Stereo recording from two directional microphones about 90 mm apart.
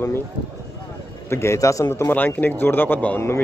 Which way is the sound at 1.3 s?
30° left (ahead or behind).